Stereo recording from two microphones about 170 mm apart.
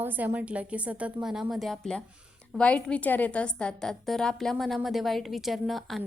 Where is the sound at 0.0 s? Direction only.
10° right (ahead or behind).